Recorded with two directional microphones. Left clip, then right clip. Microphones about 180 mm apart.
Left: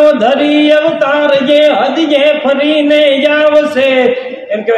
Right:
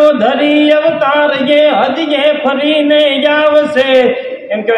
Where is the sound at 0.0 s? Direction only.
20° left (ahead or behind).